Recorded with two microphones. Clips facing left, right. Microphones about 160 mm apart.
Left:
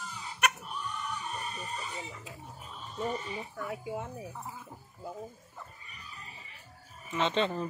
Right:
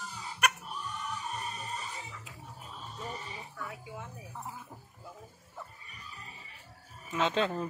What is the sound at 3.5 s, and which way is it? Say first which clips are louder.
Speech: left 7 dB; 35° left (ahead or behind).